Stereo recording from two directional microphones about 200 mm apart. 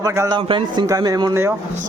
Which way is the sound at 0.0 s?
15° right (ahead or behind).